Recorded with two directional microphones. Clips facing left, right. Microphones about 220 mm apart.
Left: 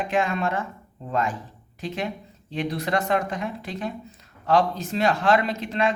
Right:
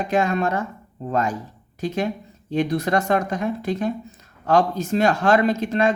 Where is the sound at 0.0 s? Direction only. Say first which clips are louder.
Right 3 dB; 40° right (ahead or behind).